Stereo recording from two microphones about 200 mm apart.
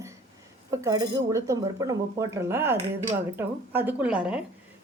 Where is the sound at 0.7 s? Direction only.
15° right (ahead or behind).